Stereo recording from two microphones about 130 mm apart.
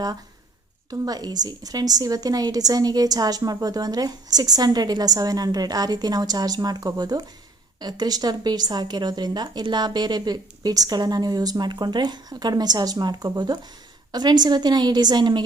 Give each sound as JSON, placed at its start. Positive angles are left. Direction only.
{"t": 0.9, "sound": "a woman's voice", "side_deg": -30}